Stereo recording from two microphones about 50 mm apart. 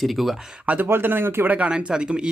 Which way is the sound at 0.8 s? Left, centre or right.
Right.